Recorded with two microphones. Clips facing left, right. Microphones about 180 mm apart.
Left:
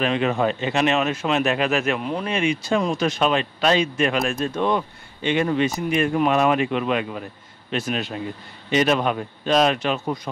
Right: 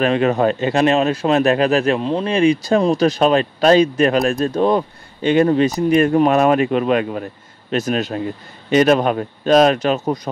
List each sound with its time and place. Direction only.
0.0 s speech: 40° right (ahead or behind)